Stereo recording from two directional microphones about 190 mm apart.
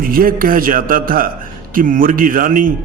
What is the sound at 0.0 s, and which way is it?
Speech, 50° right (ahead or behind).